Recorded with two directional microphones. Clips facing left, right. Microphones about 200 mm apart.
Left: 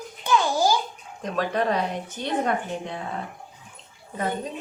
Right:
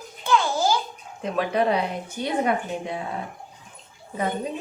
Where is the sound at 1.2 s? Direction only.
10° right (ahead or behind).